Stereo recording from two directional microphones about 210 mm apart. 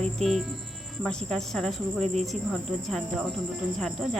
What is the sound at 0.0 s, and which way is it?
Speech, centre (ahead or behind).